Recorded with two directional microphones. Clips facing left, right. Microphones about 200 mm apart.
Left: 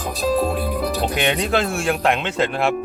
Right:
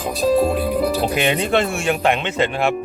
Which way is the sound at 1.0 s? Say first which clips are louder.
Right 2 dB; 5° right (ahead or behind).